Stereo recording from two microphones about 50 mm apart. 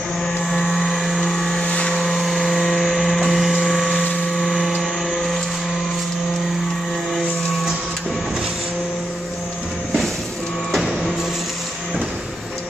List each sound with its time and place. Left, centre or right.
0.5 s vehicle: centre
1.7 s vehicle: left
2.0 s a sound: centre
5.1 s vehicle: centre